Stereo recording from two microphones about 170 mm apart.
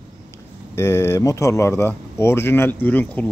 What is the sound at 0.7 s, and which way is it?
Speech, 15° left (ahead or behind).